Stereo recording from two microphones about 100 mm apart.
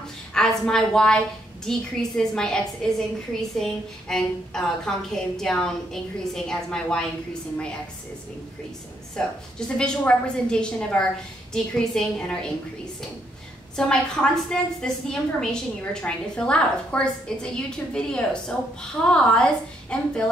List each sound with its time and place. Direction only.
0.3 s a woman's voice: 5° left (ahead or behind)
9.8 s a woman's voice: 10° left (ahead or behind)
13.7 s a woman's voice: 10° left (ahead or behind)